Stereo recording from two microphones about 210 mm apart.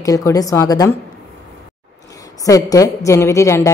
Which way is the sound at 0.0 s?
15° left (ahead or behind).